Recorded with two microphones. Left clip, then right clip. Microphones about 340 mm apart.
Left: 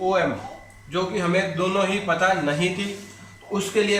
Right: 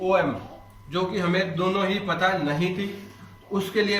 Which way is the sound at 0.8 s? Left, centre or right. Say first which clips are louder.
Left 2 dB; centre.